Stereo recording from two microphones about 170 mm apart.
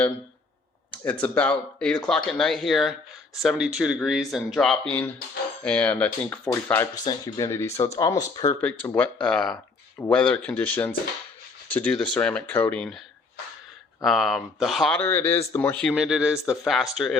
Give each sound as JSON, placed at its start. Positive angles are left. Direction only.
{"t": 1.2, "sound": "speech", "side_deg": 5}
{"t": 9.0, "sound": "speech", "side_deg": 5}
{"t": 14.0, "sound": "speech", "side_deg": 0}